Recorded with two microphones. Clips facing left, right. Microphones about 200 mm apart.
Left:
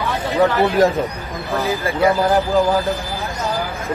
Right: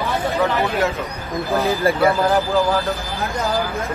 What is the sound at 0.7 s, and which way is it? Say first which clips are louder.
Speech: left 6 dB; 35° left (ahead or behind).